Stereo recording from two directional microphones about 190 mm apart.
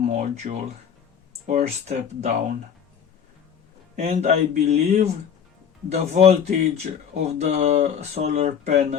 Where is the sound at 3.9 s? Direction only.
35° right (ahead or behind).